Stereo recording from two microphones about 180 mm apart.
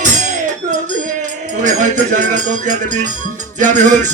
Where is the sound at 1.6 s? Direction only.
45° right (ahead or behind).